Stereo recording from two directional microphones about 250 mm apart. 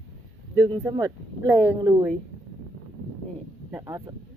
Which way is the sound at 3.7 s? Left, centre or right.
Centre.